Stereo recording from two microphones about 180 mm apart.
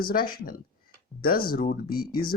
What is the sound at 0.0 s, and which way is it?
Speech, 55° left (ahead or behind).